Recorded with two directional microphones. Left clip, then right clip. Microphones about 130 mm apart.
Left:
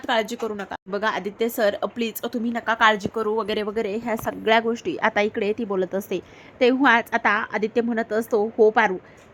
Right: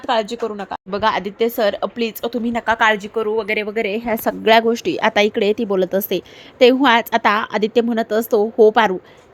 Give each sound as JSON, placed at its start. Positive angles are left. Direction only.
{"t": 0.1, "sound": "a woman's voice", "side_deg": -10}
{"t": 2.4, "sound": "a woman's voice", "side_deg": -25}
{"t": 3.3, "sound": "speech", "side_deg": 5}
{"t": 3.8, "sound": "a woman's voice", "side_deg": -20}
{"t": 4.0, "sound": "a woman's voice", "side_deg": -35}